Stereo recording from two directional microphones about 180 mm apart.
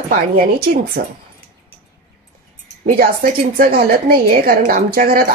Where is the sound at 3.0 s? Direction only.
55° right (ahead or behind).